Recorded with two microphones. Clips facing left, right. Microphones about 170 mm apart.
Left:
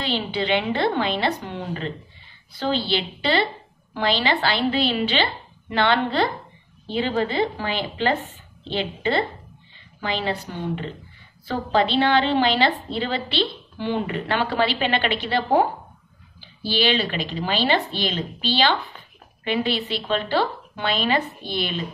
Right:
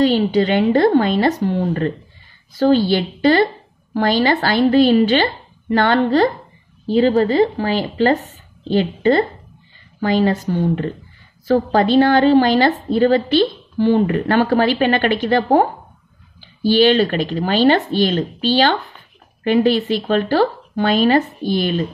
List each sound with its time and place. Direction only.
0.0 s a woman's voice: 45° right (ahead or behind)